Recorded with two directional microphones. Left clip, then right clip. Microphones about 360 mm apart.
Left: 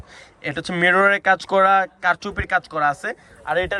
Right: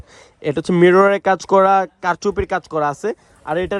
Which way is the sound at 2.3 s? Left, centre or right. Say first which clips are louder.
Right 3 dB; right.